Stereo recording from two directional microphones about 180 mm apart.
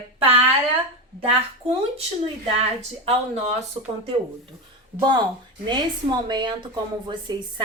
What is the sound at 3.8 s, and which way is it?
Speech, 30° right (ahead or behind).